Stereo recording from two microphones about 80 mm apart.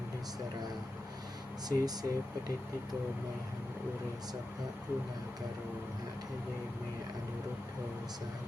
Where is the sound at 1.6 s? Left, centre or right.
Right.